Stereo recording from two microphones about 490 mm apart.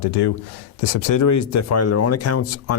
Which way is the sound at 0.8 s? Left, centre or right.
Left.